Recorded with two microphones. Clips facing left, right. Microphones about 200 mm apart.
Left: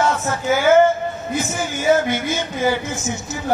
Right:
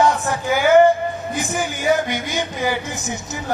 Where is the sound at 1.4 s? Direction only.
15° right (ahead or behind).